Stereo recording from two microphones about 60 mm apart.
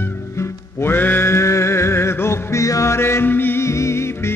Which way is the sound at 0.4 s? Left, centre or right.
Left.